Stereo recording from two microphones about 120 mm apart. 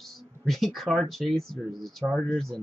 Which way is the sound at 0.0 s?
Centre (ahead or behind).